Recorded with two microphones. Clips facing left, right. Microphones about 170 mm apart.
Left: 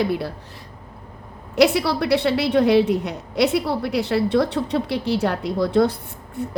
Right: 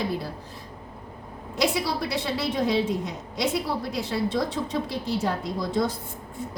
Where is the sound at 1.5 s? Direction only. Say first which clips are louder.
Left 8 dB; 70° left (ahead or behind).